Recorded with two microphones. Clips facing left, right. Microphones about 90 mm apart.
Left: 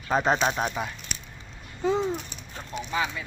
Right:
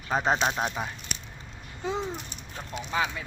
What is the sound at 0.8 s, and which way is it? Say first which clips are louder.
Speech: left 2 dB; 20° right (ahead or behind).